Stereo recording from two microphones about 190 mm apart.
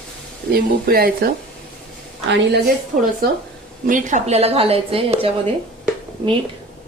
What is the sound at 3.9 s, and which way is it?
A woman's voice, 40° right (ahead or behind).